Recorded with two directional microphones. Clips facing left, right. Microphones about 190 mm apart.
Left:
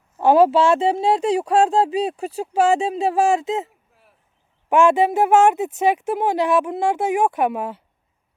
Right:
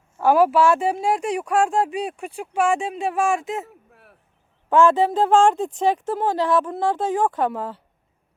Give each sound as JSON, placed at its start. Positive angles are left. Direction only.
{"t": 0.2, "sound": "speech", "side_deg": 25}
{"t": 2.1, "sound": "speech", "side_deg": 40}
{"t": 3.9, "sound": "cricket", "side_deg": -65}
{"t": 4.7, "sound": "a woman's voice", "side_deg": 10}